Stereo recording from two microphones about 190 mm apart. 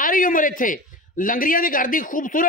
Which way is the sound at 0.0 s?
45° left (ahead or behind).